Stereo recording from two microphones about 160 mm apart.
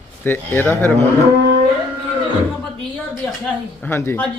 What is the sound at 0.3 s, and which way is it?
Speech, 10° left (ahead or behind).